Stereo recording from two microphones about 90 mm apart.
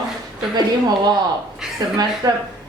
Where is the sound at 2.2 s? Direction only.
45° right (ahead or behind).